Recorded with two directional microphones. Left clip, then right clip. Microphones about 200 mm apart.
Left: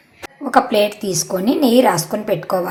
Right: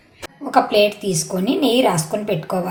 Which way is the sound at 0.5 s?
20° left (ahead or behind).